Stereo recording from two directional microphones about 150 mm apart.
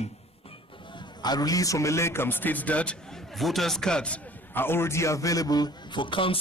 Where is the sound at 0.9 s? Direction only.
25° left (ahead or behind).